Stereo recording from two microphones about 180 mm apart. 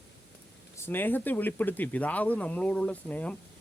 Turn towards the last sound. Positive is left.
turn(degrees=10)  # may be behind; listen again after turning